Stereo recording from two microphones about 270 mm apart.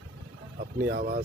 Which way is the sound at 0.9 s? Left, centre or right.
Right.